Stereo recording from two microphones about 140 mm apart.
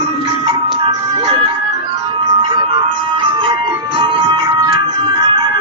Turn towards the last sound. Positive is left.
turn(degrees=-35)  # may be behind; listen again after turning